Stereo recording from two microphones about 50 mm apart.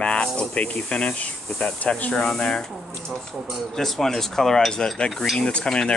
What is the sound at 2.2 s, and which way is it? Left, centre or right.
Cutlery, centre.